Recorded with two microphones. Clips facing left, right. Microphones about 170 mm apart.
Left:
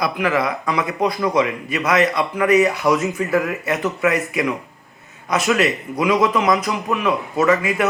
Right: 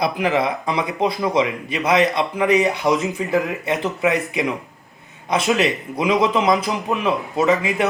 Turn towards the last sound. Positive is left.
turn(degrees=-25)  # may be behind; listen again after turning